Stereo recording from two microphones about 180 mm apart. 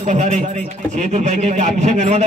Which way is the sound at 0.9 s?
40° right (ahead or behind).